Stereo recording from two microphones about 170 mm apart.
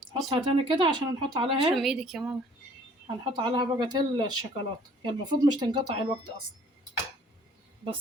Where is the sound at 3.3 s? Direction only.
30° right (ahead or behind).